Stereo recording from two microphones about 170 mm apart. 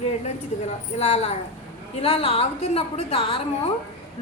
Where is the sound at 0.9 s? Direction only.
35° left (ahead or behind).